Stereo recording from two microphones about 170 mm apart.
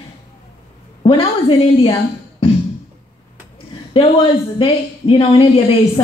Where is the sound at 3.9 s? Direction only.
30° left (ahead or behind).